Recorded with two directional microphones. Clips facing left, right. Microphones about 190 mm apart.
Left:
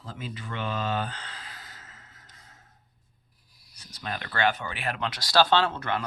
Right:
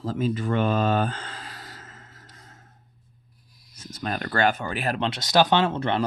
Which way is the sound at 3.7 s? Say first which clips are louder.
Right 6 dB; 45° right (ahead or behind).